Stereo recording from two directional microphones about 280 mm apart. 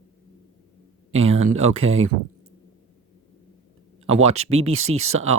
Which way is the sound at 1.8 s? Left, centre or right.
Right.